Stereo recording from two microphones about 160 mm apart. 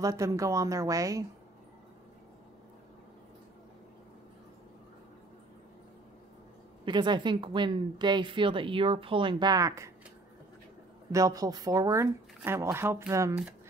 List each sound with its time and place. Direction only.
0.0 s speech: 20° right (ahead or behind)
6.8 s a woman's voice: 30° right (ahead or behind)
11.1 s speech: 20° right (ahead or behind)